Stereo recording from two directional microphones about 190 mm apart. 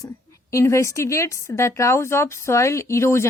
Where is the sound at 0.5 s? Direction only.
15° left (ahead or behind).